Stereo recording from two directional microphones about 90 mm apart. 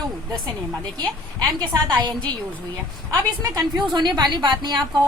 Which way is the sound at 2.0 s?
55° right (ahead or behind).